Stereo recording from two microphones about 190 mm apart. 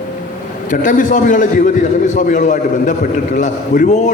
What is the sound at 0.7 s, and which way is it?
A man's voice, 45° left (ahead or behind).